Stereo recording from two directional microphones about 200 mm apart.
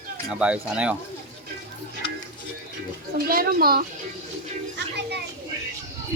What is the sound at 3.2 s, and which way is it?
Speech, 50° right (ahead or behind).